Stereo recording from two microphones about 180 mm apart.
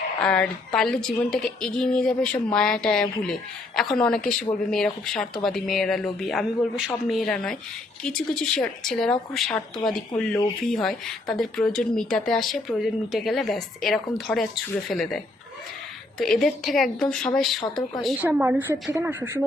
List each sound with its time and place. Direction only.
0.2 s a woman's voice: 5° left (ahead or behind)
9.7 s speech: 25° left (ahead or behind)
10.7 s a woman's voice: centre (ahead or behind)